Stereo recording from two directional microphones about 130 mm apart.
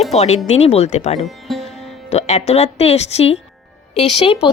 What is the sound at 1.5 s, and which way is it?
Sitar, centre (ahead or behind).